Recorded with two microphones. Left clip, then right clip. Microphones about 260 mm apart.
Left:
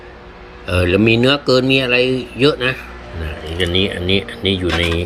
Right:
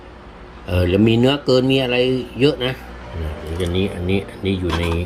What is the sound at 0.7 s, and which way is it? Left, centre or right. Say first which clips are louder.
Speech: left 3 dB; centre.